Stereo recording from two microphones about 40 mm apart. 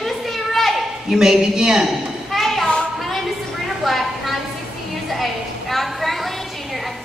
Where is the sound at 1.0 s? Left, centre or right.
Centre.